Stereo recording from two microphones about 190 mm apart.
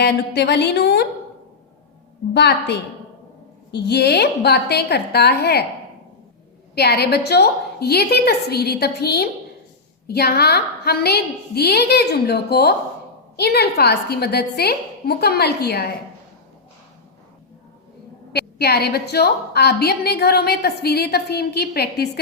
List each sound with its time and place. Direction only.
0.0 s a woman's voice: 60° left (ahead or behind)
2.3 s a woman's voice: 60° left (ahead or behind)
6.7 s a woman's voice: 60° left (ahead or behind)
18.3 s a woman's voice: 55° left (ahead or behind)